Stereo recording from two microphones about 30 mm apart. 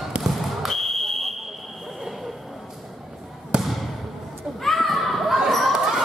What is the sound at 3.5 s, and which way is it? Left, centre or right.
Basketball bounce, right.